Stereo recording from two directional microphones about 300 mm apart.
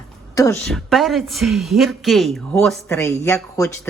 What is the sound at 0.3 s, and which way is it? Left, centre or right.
A woman's voice, centre.